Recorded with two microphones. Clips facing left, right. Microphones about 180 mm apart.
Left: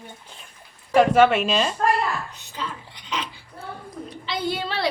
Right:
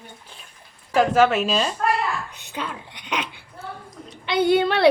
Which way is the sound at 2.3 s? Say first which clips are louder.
Right 2 dB; 60° right (ahead or behind).